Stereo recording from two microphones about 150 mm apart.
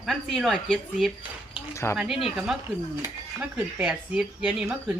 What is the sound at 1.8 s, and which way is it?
Music, 15° left (ahead or behind).